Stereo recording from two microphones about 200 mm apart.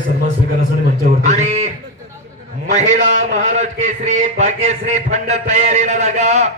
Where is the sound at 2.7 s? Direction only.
35° right (ahead or behind).